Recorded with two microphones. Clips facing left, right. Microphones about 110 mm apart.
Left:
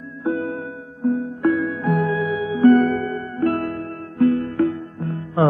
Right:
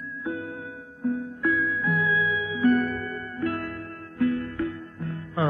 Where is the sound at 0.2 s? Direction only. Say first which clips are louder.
Left 10 dB; 55° left (ahead or behind).